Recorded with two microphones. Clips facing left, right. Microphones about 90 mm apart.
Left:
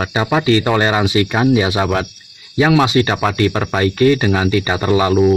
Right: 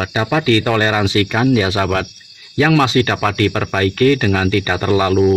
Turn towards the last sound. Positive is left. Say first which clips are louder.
# even
turn(degrees=10)  # may be behind; listen again after turning